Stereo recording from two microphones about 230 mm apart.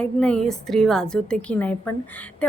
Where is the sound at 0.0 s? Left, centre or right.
Centre.